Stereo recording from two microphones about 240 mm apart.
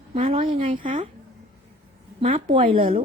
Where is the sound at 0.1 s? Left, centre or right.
Right.